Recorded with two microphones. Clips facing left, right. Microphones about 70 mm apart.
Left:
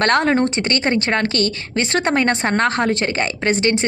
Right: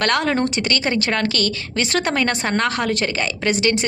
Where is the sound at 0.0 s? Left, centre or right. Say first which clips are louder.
Left 3 dB; left.